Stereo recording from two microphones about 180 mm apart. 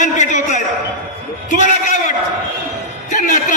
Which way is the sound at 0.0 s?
45° left (ahead or behind).